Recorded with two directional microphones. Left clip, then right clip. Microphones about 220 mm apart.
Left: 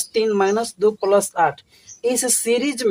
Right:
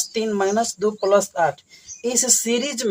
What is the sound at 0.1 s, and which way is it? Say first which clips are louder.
Speech: left 5 dB; 40° left (ahead or behind).